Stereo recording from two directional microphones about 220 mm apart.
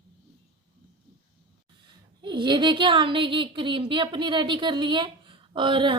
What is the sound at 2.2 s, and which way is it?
Speech, 20° right (ahead or behind).